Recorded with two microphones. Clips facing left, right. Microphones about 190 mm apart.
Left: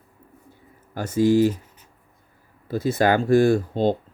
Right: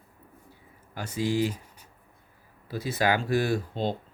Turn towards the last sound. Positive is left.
turn(degrees=45)  # may be behind; listen again after turning